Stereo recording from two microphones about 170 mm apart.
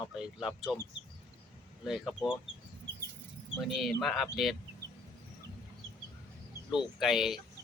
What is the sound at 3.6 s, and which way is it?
Speech, centre (ahead or behind).